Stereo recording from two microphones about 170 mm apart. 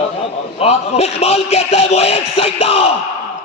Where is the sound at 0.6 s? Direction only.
40° left (ahead or behind).